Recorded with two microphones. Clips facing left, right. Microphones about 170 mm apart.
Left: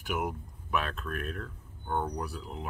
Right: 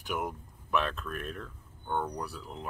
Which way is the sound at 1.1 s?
50° left (ahead or behind).